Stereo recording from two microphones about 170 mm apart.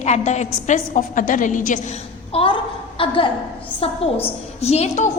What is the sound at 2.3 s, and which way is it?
A woman's voice, 30° left (ahead or behind).